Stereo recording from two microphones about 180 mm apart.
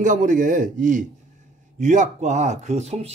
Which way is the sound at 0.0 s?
45° right (ahead or behind).